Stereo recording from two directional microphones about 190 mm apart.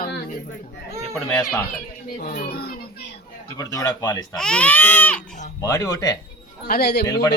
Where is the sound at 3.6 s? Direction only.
15° left (ahead or behind).